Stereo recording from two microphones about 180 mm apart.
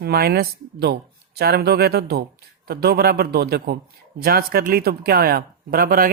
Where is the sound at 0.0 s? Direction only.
60° right (ahead or behind).